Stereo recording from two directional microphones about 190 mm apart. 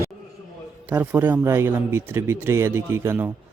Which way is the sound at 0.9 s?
10° right (ahead or behind).